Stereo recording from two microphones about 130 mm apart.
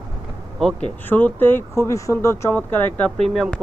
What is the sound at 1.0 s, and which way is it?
Speech, 15° left (ahead or behind).